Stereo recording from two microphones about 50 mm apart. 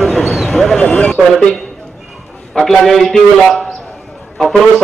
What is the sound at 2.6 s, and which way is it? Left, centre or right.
A man's voice, centre.